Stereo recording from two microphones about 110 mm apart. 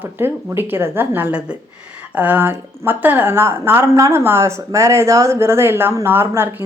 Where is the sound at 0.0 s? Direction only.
20° right (ahead or behind).